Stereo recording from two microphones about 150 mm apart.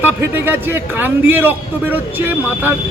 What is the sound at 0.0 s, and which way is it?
A man's voice, 15° right (ahead or behind).